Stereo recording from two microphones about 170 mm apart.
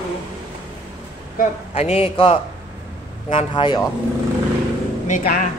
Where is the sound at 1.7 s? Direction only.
35° left (ahead or behind).